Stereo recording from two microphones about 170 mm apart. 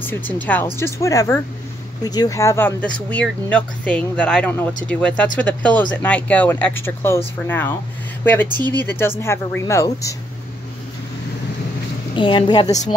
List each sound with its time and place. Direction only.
0.0 s speech: 10° left (ahead or behind)
12.2 s a woman's voice: 30° left (ahead or behind)